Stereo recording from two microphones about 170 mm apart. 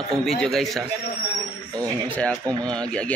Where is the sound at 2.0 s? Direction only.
10° left (ahead or behind).